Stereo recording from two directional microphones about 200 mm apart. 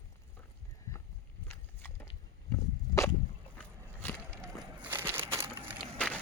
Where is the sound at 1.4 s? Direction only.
10° left (ahead or behind).